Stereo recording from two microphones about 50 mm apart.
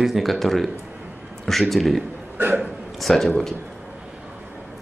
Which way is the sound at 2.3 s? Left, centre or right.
Right.